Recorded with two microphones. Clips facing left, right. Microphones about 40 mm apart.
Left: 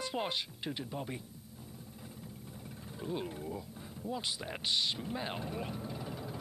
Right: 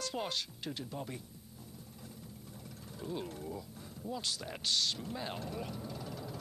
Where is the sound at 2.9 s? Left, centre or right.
Centre.